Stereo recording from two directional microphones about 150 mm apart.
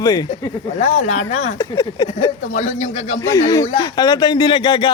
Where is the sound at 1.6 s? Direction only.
25° left (ahead or behind).